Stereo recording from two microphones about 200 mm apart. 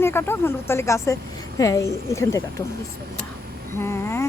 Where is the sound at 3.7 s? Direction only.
15° left (ahead or behind).